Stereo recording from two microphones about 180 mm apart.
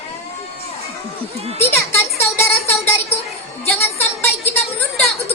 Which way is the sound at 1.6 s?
15° left (ahead or behind).